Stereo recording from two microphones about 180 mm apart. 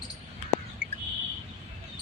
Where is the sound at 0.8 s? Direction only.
70° right (ahead or behind).